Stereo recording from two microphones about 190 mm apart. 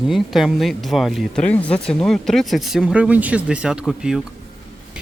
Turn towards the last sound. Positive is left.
turn(degrees=-5)  # may be behind; listen again after turning